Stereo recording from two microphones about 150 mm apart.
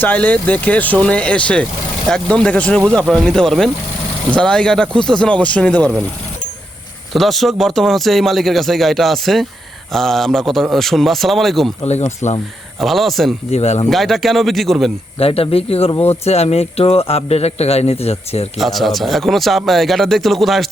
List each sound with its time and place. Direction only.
0.0 s speech: 10° left (ahead or behind)
7.1 s speech: centre (ahead or behind)
11.9 s speech: 50° left (ahead or behind)
12.8 s speech: centre (ahead or behind)
13.5 s speech: 45° left (ahead or behind)
13.9 s speech: centre (ahead or behind)
15.2 s speech: 40° left (ahead or behind)
18.5 s speech: centre (ahead or behind)